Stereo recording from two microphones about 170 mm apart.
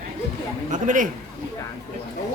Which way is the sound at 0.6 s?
50° right (ahead or behind).